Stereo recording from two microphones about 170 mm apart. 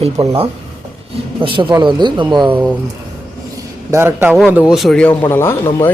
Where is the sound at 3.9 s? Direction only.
15° right (ahead or behind).